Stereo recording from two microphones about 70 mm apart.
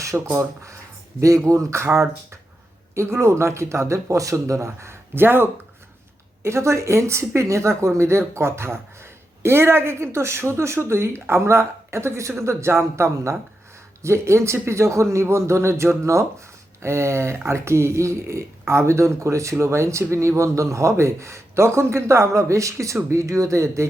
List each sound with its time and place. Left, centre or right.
0.3 s speech: right
6.4 s speech: right